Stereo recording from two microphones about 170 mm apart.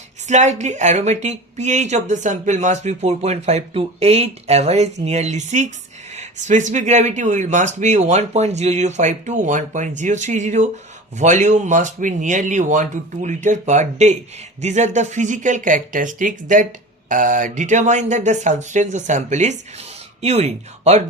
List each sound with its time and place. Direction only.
0.3 s speech: 45° right (ahead or behind)